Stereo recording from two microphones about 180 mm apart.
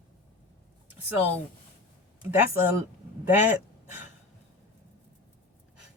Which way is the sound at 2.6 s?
10° right (ahead or behind).